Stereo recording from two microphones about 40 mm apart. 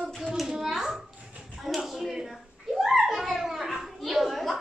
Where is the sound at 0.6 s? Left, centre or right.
Centre.